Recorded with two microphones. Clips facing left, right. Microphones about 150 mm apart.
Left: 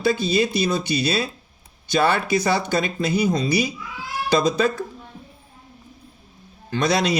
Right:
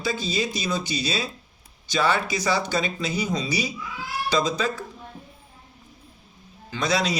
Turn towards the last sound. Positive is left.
turn(degrees=60)  # may be behind; listen again after turning